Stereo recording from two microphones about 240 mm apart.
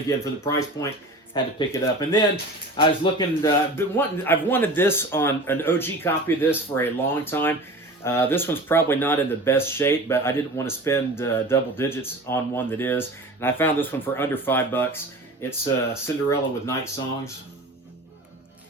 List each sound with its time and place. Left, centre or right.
0.8 s speech: centre